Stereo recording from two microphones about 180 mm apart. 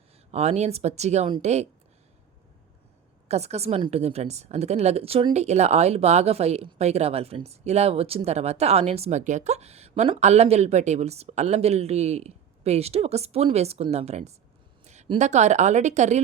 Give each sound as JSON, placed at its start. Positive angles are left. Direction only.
{"t": 0.3, "sound": "a woman's voice", "side_deg": -35}
{"t": 3.2, "sound": "a woman's voice", "side_deg": -35}